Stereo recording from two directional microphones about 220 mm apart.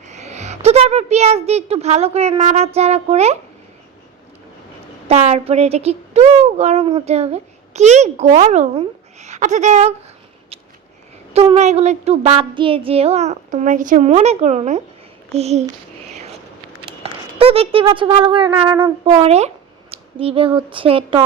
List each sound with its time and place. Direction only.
0.1 s speech: 30° right (ahead or behind)
5.0 s speech: 30° right (ahead or behind)
11.3 s speech: 30° right (ahead or behind)
16.8 s speech: 25° right (ahead or behind)